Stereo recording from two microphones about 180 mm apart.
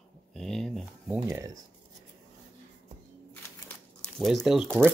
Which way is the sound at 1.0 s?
10° right (ahead or behind).